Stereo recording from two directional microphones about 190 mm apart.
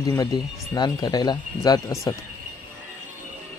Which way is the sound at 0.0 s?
20° left (ahead or behind).